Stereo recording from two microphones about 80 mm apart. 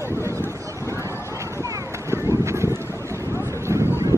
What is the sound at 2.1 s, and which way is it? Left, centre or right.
Run, right.